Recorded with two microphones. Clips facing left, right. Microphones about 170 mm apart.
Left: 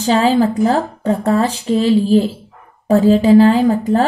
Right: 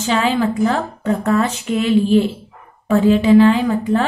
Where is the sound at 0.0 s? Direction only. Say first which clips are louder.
Left 4 dB; 35° left (ahead or behind).